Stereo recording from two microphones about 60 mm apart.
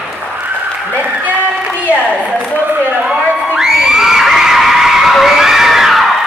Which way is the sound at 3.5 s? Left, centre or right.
Centre.